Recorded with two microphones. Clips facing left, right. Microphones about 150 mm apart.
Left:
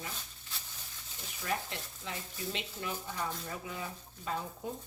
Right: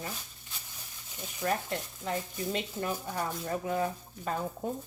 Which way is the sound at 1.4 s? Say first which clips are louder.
Right 6 dB; 45° right (ahead or behind).